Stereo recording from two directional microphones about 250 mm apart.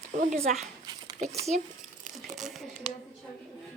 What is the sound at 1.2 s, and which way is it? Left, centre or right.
Speech, right.